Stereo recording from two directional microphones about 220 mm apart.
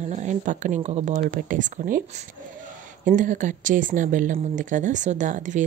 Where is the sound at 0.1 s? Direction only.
35° right (ahead or behind).